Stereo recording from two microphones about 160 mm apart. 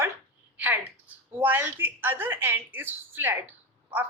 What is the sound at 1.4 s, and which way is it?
Speech, 10° right (ahead or behind).